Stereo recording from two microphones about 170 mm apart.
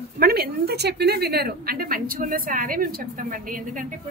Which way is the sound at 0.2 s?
65° right (ahead or behind).